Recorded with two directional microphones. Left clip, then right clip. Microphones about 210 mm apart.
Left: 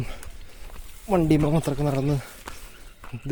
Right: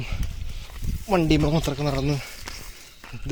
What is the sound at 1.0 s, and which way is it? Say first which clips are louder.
Speech: right 1 dB; 5° left (ahead or behind).